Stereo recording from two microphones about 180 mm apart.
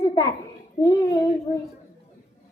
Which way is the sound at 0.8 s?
20° left (ahead or behind).